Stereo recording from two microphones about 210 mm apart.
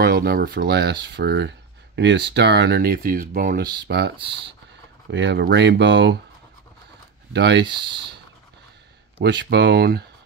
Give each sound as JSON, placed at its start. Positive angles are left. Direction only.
{"t": 0.0, "sound": "speech", "side_deg": -45}
{"t": 5.1, "sound": "speech", "side_deg": -55}
{"t": 7.3, "sound": "speech", "side_deg": -50}
{"t": 9.2, "sound": "speech", "side_deg": -55}